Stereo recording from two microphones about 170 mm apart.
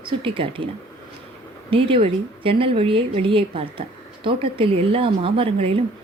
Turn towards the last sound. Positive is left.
turn(degrees=-35)  # may be behind; listen again after turning